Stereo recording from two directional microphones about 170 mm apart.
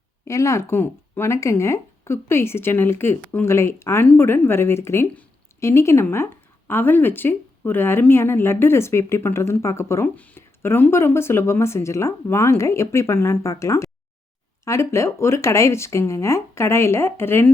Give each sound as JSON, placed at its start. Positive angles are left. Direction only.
{"t": 0.3, "sound": "speech", "side_deg": 15}